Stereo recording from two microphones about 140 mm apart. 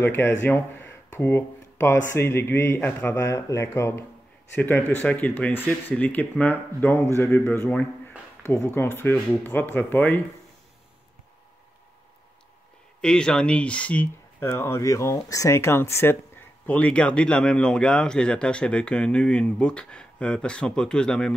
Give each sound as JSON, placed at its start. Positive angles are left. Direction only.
{"t": 0.0, "sound": "speech", "side_deg": 15}
{"t": 13.0, "sound": "speech", "side_deg": 5}